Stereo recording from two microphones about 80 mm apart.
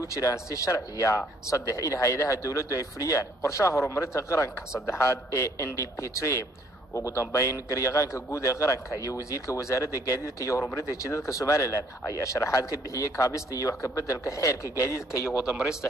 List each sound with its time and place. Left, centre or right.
0.0 s a man's voice: left
15.4 s speech: centre